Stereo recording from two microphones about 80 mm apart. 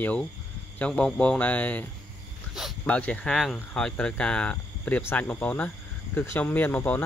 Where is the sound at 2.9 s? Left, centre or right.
Centre.